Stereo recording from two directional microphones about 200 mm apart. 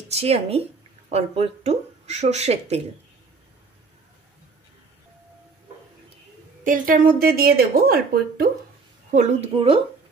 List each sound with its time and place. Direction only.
0.1 s speech: 30° right (ahead or behind)
6.6 s speech: 40° right (ahead or behind)
9.1 s speech: 35° right (ahead or behind)